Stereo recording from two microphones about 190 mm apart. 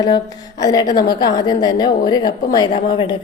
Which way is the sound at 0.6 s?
20° left (ahead or behind).